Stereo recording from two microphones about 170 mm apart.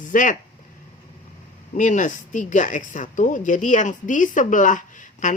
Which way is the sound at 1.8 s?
50° left (ahead or behind).